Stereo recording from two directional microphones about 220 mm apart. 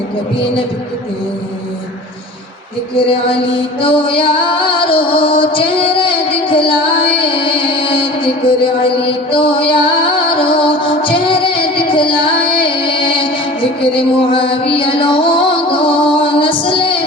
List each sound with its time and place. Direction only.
3.8 s music: 25° left (ahead or behind)